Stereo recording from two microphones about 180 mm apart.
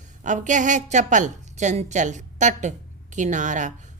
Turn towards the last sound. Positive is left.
turn(degrees=-45)  # may be behind; listen again after turning